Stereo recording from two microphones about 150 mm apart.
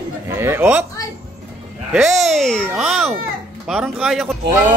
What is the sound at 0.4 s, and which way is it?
Speech, 15° right (ahead or behind).